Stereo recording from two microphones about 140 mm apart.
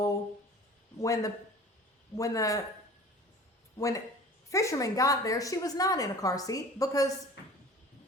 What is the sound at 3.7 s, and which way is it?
A woman's voice, 25° left (ahead or behind).